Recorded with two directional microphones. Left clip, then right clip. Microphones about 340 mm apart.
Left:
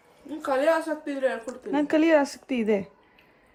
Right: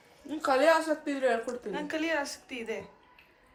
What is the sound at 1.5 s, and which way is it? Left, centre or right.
A woman's voice, centre.